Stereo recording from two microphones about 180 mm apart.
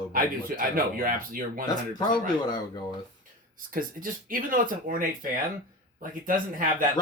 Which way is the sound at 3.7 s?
50° right (ahead or behind).